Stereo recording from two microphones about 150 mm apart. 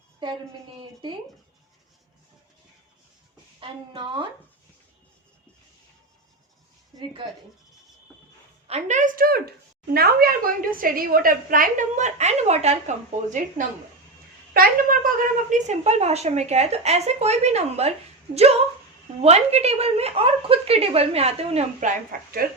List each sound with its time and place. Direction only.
3.6 s a woman's voice: 30° right (ahead or behind)
7.0 s a woman's voice: 35° right (ahead or behind)
8.6 s a woman's voice: 50° right (ahead or behind)
14.5 s a woman's voice: 70° right (ahead or behind); by 17.9 s 45° right (ahead or behind)
19.2 s a woman's voice: 45° right (ahead or behind); by 22.4 s 70° right (ahead or behind)